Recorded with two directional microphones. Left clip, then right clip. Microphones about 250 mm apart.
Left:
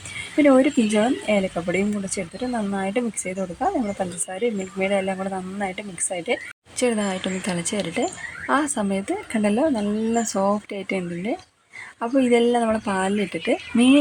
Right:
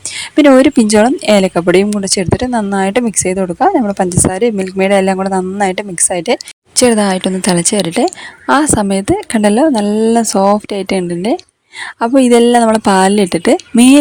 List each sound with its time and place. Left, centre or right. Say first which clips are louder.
0.3 s speech: right 10 dB; right